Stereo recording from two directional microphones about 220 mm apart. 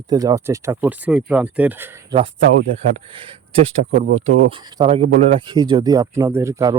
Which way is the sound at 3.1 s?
25° right (ahead or behind).